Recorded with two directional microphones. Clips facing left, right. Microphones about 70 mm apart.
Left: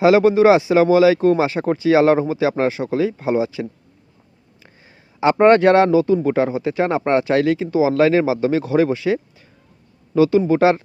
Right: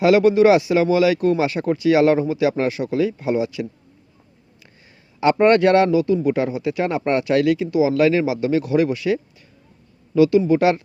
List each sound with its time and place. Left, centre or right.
0.0 s speech: left
5.2 s a man's voice: left